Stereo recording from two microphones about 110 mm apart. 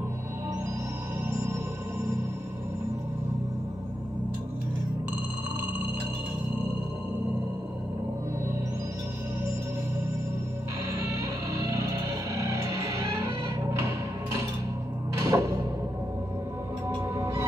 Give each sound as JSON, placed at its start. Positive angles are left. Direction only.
{"t": 11.1, "sound": "music", "side_deg": -30}
{"t": 15.1, "sound": "music", "side_deg": -30}
{"t": 17.2, "sound": "music", "side_deg": -30}